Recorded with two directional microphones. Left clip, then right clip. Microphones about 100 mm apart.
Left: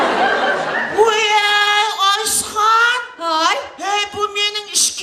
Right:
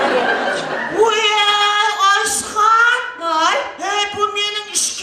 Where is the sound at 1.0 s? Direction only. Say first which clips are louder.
Right 1 dB; 35° right (ahead or behind).